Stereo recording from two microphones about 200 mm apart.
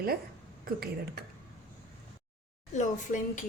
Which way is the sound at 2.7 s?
40° left (ahead or behind).